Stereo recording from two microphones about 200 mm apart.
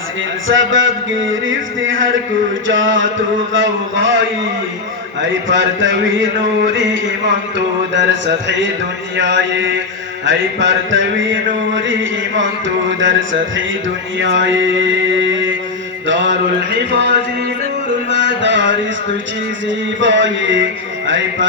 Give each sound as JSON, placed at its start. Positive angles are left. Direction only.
{"t": 0.4, "sound": "mantra", "side_deg": -75}
{"t": 5.3, "sound": "mantra", "side_deg": -70}
{"t": 9.1, "sound": "mantra", "side_deg": -65}
{"t": 16.9, "sound": "a sound", "side_deg": -60}
{"t": 19.6, "sound": "mantra", "side_deg": -65}
{"t": 21.1, "sound": "music", "side_deg": -70}